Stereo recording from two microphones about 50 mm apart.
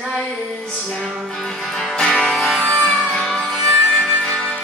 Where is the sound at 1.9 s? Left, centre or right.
Centre.